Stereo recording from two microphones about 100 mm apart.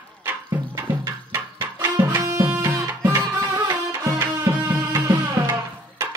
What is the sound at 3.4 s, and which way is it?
Music, 35° right (ahead or behind).